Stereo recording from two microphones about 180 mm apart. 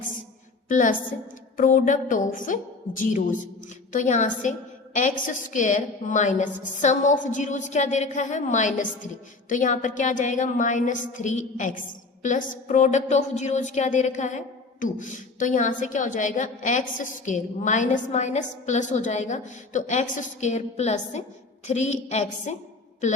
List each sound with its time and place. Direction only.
0.7 s a woman's voice: 45° left (ahead or behind)